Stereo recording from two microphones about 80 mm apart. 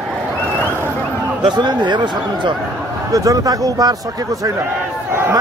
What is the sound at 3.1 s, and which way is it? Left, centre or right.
A man's voice, right.